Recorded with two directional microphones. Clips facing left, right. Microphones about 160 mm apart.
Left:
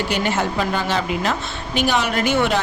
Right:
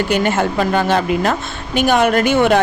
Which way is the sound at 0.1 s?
50° right (ahead or behind).